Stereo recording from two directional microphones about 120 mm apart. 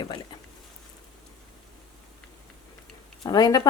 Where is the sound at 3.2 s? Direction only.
35° left (ahead or behind).